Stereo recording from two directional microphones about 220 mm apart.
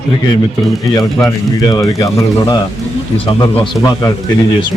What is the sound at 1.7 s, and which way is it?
A man's voice, 15° left (ahead or behind).